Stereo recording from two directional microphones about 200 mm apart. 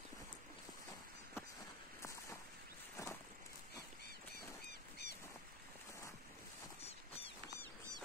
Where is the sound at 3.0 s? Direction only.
15° left (ahead or behind).